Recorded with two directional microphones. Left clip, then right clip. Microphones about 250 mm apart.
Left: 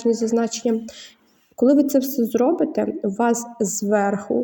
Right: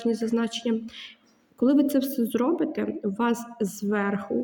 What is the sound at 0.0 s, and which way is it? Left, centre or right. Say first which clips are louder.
A woman's voice: left 7 dB; centre.